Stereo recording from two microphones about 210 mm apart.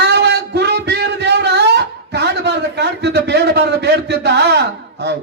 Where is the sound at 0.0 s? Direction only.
50° right (ahead or behind).